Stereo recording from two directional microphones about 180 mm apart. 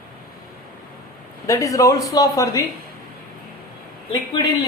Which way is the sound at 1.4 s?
15° left (ahead or behind).